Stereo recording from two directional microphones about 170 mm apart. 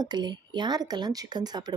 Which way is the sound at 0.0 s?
25° right (ahead or behind).